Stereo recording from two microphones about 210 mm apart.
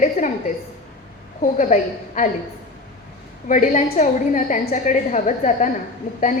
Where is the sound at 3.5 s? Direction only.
40° left (ahead or behind).